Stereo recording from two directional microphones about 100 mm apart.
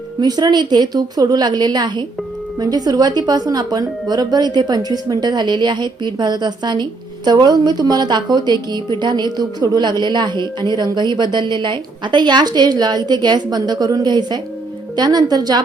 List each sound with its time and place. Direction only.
0.2 s a woman's voice: 45° right (ahead or behind)